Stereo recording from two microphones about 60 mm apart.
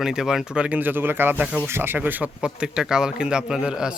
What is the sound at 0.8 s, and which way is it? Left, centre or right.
A man's voice, right.